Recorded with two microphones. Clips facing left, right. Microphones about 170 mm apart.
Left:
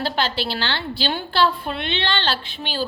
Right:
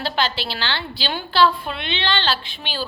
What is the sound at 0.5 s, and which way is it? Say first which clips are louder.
A woman's voice: left 2 dB; 50° left (ahead or behind).